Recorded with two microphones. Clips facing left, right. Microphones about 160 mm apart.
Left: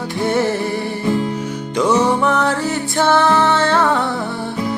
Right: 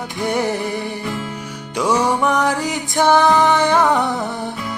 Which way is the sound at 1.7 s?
10° right (ahead or behind).